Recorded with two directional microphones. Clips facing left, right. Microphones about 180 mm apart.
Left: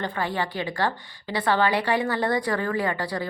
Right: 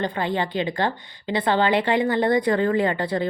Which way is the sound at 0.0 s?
20° right (ahead or behind).